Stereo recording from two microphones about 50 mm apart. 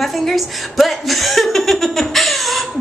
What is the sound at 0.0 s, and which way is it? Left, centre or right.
A woman's voice, centre.